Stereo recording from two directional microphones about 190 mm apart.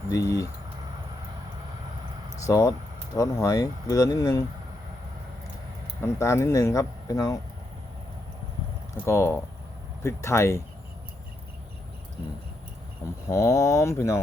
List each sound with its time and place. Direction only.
0.1 s speech: 15° left (ahead or behind)
2.5 s speech: 20° left (ahead or behind)
6.0 s speech: 15° left (ahead or behind)
9.0 s speech: 15° left (ahead or behind)
13.3 s speech: 15° left (ahead or behind)